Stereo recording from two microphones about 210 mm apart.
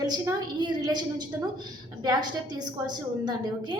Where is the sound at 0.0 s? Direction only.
20° right (ahead or behind).